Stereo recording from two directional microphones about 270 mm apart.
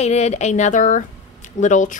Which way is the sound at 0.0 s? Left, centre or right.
Left.